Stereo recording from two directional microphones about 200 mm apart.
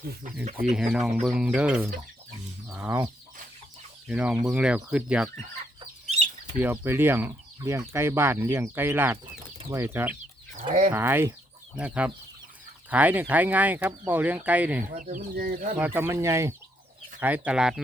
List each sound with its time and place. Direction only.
0.4 s speech: 40° right (ahead or behind)
0.8 s speech: 5° right (ahead or behind)
4.1 s speech: 5° right (ahead or behind)
6.6 s speech: 10° right (ahead or behind)
15.0 s speech: 40° right (ahead or behind)
15.8 s speech: 10° right (ahead or behind)